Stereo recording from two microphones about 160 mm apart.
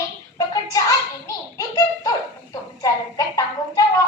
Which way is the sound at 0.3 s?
20° left (ahead or behind).